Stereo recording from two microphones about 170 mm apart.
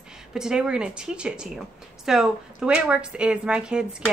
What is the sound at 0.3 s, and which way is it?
A woman's voice, 5° right (ahead or behind).